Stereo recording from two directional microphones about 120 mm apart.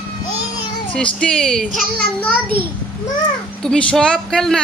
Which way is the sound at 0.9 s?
10° left (ahead or behind).